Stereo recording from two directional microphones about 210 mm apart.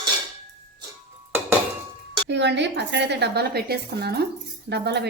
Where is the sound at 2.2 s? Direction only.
55° right (ahead or behind).